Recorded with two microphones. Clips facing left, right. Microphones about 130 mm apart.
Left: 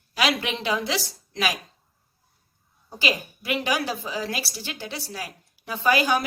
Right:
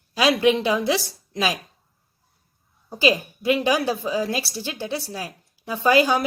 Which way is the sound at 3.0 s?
25° right (ahead or behind).